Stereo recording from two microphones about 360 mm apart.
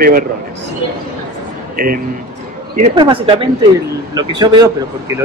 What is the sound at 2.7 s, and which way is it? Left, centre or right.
A man's voice, centre.